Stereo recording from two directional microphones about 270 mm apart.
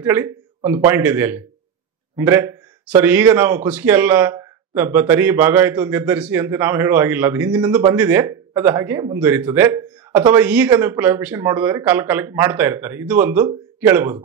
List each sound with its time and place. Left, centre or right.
0.0 s a man's voice: centre